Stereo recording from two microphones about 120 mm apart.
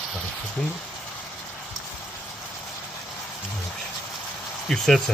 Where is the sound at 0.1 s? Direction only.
10° left (ahead or behind).